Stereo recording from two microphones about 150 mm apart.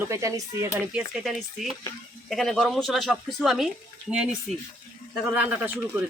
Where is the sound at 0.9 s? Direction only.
Centre (ahead or behind).